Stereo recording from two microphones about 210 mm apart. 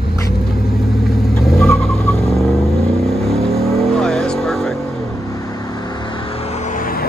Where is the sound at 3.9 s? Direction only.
5° left (ahead or behind).